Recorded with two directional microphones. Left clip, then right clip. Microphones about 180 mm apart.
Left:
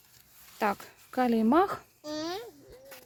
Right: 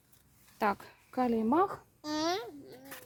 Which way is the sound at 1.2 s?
30° left (ahead or behind).